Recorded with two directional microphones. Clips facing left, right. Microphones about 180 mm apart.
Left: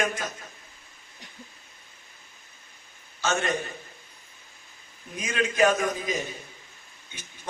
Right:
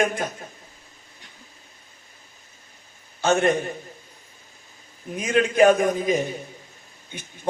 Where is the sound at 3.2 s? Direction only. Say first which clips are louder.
Right 7 dB; 55° right (ahead or behind).